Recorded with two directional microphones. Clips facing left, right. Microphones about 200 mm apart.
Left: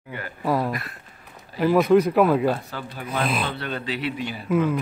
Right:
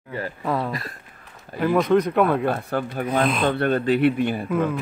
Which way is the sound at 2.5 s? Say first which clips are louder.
Right 2 dB; 55° right (ahead or behind).